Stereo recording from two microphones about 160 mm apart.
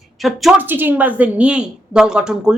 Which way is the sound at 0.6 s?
10° right (ahead or behind).